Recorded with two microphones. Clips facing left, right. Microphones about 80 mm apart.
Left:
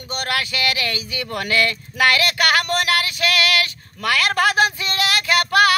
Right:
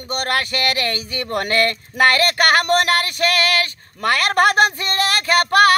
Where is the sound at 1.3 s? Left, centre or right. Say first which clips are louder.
Right 2 dB; right.